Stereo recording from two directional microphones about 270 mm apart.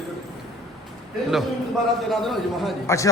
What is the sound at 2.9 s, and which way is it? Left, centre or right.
Speech, centre.